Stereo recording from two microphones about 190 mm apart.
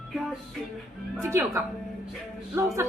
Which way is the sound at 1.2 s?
15° right (ahead or behind).